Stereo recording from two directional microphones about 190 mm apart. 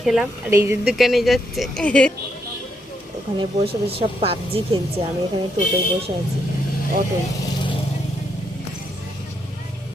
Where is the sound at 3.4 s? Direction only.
30° right (ahead or behind).